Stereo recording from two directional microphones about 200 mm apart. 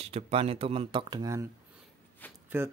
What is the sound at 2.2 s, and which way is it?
Speech, 10° left (ahead or behind).